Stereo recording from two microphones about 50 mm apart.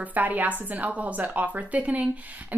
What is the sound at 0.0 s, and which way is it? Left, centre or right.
Speech, right.